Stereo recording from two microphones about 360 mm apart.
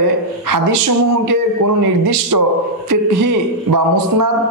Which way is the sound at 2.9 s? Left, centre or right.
Right.